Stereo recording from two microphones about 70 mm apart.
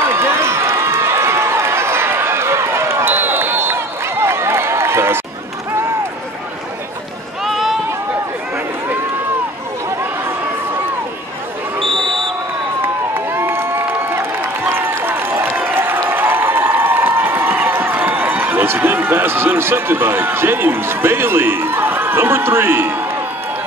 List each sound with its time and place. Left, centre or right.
0.1 s run: right
7.4 s run: centre
12.8 s crowd: right